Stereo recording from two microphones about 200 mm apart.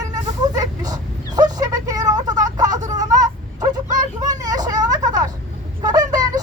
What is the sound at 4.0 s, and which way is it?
Vehicle, 20° right (ahead or behind).